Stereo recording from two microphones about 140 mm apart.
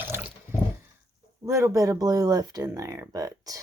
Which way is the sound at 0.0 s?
15° right (ahead or behind).